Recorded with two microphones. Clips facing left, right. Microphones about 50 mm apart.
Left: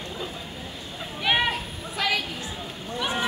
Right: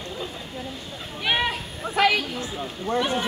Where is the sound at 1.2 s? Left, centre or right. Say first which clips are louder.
Left 1 dB; centre.